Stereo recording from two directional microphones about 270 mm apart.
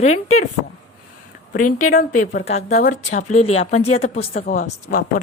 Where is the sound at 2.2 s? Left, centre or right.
Left.